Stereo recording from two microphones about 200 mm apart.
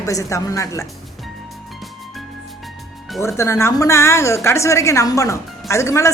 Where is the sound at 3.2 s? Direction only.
15° left (ahead or behind).